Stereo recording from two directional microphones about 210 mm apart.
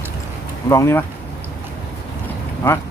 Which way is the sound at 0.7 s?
10° left (ahead or behind).